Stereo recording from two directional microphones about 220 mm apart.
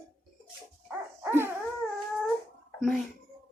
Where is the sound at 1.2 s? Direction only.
10° right (ahead or behind).